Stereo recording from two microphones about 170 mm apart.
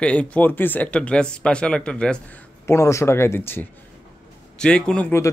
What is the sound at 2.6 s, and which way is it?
Speech, 15° left (ahead or behind).